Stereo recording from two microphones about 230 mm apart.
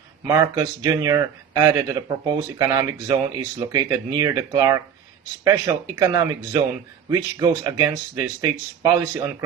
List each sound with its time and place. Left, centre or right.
0.3 s speech: centre